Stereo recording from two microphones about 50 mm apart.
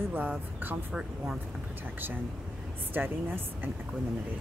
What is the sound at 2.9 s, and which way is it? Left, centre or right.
Speech, right.